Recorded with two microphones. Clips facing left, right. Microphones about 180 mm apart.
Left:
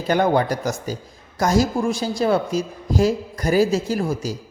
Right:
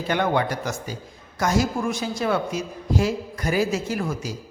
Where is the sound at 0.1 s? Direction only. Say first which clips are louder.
Left 5 dB; 40° left (ahead or behind).